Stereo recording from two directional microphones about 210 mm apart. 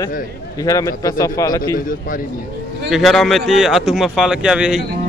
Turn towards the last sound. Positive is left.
turn(degrees=-5)  # may be behind; listen again after turning